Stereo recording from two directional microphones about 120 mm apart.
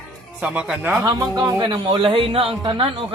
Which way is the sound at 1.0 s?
35° right (ahead or behind).